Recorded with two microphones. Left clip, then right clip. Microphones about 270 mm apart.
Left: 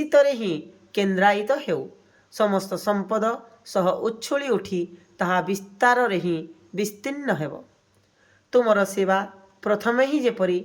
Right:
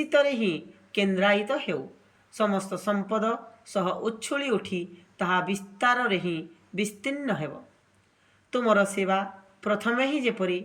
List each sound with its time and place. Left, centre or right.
0.1 s speech: centre